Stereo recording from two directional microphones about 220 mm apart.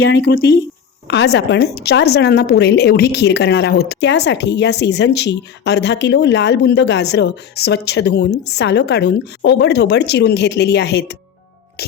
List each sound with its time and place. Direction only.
0.0 s a woman's voice: 50° left (ahead or behind)